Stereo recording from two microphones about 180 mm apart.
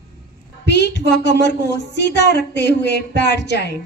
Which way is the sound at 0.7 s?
70° left (ahead or behind).